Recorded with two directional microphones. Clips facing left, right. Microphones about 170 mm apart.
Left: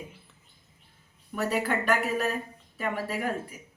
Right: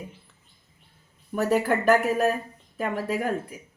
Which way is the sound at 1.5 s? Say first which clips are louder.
Right 6 dB; 45° right (ahead or behind).